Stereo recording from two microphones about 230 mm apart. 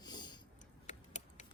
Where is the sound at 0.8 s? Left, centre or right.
Left.